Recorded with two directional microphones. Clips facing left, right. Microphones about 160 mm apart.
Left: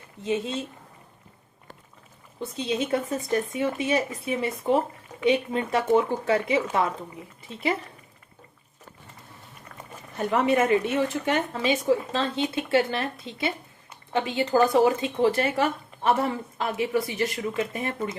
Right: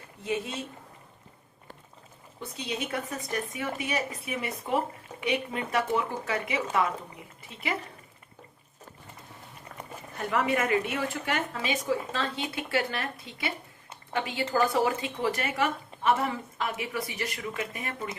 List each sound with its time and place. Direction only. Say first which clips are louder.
0.2 s speech: left 4 dB; 25° left (ahead or behind)
2.6 s speech: left 7 dB; 25° left (ahead or behind)
10.2 s speech: left 5 dB; 25° left (ahead or behind)